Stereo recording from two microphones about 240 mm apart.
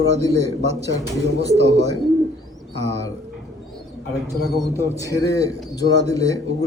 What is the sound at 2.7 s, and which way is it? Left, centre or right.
Speech, right.